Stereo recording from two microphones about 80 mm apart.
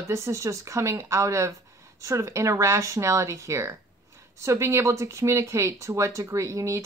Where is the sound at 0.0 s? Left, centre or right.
Right.